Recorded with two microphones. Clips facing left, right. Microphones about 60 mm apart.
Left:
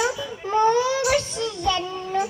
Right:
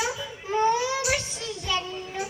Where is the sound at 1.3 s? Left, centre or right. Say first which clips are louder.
Left 10 dB; left.